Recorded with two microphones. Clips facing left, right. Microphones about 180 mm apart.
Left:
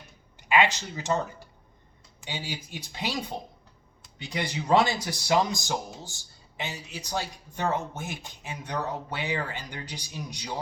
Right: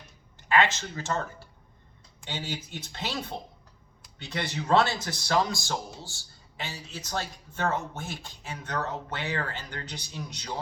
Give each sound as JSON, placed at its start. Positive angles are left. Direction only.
{"t": 0.3, "sound": "a man's voice", "side_deg": 15}